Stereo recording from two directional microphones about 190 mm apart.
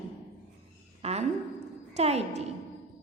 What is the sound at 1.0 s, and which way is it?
A woman's voice, 35° right (ahead or behind).